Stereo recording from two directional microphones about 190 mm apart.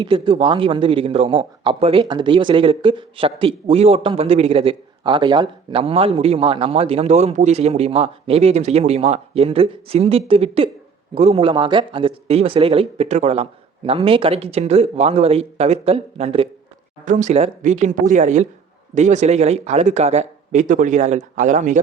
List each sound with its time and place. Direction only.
0.0 s speech: 30° right (ahead or behind)